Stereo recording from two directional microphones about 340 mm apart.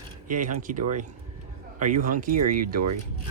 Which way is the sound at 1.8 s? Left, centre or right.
Right.